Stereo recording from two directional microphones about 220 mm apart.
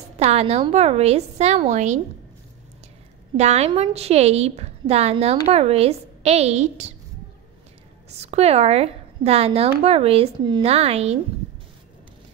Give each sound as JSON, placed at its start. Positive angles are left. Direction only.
{"t": 0.2, "sound": "a woman's voice", "side_deg": -30}
{"t": 3.3, "sound": "a woman's voice", "side_deg": -30}
{"t": 8.2, "sound": "a woman's voice", "side_deg": -30}